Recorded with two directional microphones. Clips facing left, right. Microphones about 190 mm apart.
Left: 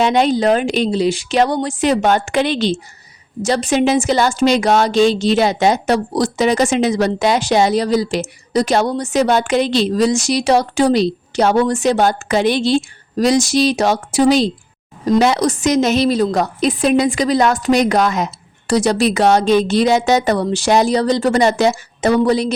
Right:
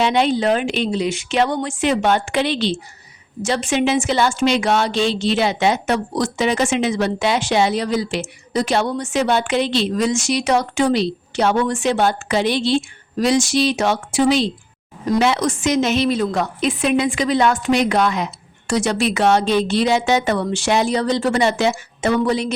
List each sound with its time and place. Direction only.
0.0 s a woman's voice: 45° left (ahead or behind)